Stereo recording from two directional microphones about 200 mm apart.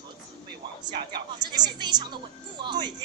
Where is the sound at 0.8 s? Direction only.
20° right (ahead or behind).